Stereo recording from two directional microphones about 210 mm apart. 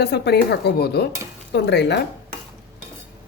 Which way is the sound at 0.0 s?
50° left (ahead or behind).